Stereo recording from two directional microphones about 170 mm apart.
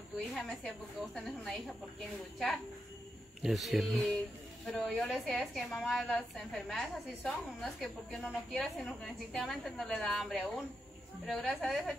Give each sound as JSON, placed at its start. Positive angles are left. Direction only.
{"t": 0.3, "sound": "a woman's voice", "side_deg": 0}